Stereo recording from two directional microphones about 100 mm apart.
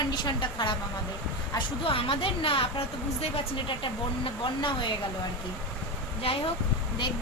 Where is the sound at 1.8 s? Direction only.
65° left (ahead or behind).